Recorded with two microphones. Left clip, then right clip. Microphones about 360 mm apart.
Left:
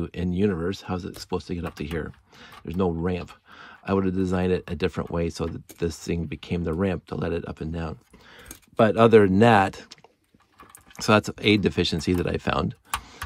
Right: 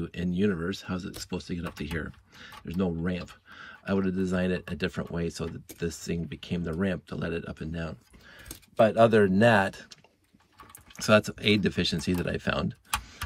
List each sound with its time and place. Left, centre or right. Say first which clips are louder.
0.0 s speech: left 4 dB; centre
11.0 s speech: left 2 dB; centre